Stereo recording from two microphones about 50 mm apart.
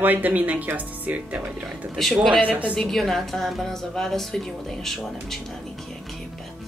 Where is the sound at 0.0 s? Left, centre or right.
Right.